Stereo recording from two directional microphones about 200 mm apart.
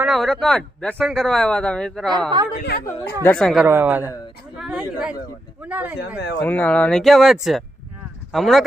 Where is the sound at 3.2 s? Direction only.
5° left (ahead or behind).